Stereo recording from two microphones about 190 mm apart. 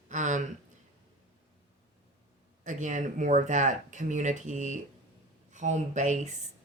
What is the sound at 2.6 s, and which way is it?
Speech, 40° right (ahead or behind).